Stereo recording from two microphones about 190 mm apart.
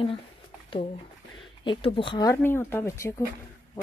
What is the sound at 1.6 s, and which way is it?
Speech, 25° left (ahead or behind).